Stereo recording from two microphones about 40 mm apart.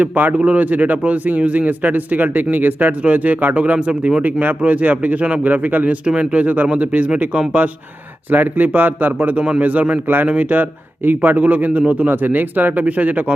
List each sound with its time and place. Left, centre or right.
0.0 s a man's voice: right
7.6 s a man's voice: right
12.0 s a man's voice: right
12.8 s speech: right